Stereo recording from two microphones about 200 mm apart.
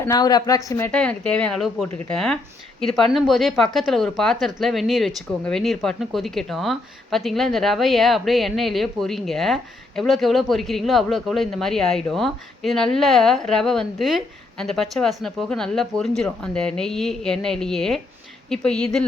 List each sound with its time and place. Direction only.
0.0 s a woman's voice: 20° left (ahead or behind)
0.9 s a woman's voice: 5° left (ahead or behind)